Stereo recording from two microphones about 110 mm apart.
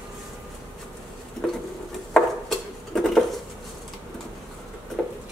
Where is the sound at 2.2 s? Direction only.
5° left (ahead or behind).